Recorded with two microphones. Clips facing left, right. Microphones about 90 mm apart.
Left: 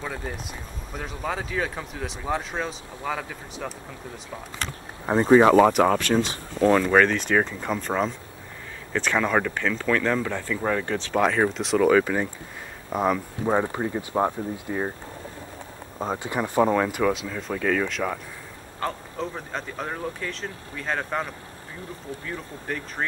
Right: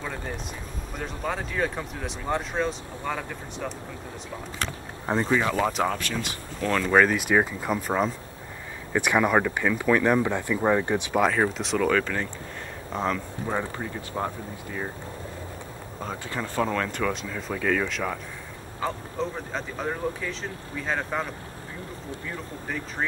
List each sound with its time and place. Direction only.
0.0 s vehicle: 5° left (ahead or behind)
0.9 s speech: centre (ahead or behind)
5.0 s speech: 10° left (ahead or behind)
5.6 s speech: 65° left (ahead or behind)
6.8 s speech: centre (ahead or behind)
8.9 s speech: 15° right (ahead or behind)
11.1 s speech: centre (ahead or behind); by 14.9 s 25° left (ahead or behind)
16.0 s speech: 20° left (ahead or behind); by 23.0 s centre (ahead or behind)